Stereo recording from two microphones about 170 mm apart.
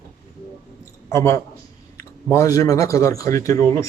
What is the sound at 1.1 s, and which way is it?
A man's voice, 15° left (ahead or behind).